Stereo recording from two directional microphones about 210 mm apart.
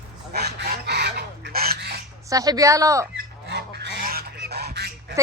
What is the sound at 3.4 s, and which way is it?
Goose, 55° right (ahead or behind).